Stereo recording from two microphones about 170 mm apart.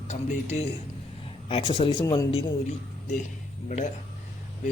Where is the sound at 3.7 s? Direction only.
45° left (ahead or behind).